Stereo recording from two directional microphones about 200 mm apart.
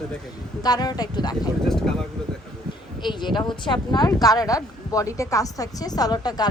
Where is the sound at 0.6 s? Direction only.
20° left (ahead or behind).